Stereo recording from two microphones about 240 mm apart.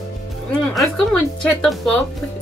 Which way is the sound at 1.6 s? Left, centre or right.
Centre.